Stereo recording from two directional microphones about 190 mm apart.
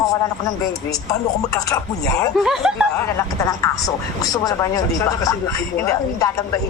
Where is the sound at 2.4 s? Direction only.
Centre (ahead or behind).